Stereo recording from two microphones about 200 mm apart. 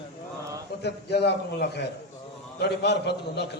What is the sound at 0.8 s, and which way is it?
A man's voice, 55° left (ahead or behind).